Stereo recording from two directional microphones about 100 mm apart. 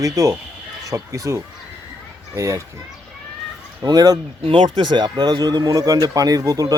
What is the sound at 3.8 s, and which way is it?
Speech, 40° right (ahead or behind).